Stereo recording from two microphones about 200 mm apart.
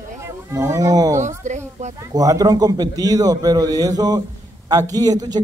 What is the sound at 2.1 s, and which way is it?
A man's voice, 15° right (ahead or behind).